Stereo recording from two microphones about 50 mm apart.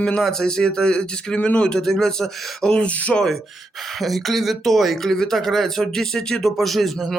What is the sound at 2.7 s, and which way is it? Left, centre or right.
Speech, left.